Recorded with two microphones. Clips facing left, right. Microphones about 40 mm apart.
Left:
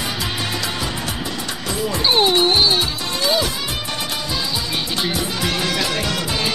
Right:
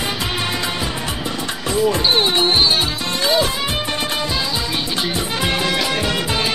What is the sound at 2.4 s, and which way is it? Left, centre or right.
Music, right.